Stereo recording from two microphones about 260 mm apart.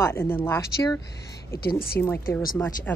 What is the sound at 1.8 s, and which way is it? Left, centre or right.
A woman's voice, centre.